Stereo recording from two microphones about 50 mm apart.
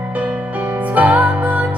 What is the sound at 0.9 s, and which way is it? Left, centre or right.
Music, right.